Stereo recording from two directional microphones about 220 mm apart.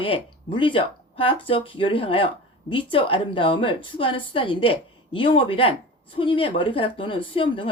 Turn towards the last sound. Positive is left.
turn(degrees=25)  # may be behind; listen again after turning